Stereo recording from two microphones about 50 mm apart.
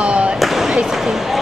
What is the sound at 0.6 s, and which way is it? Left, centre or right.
Speech, centre.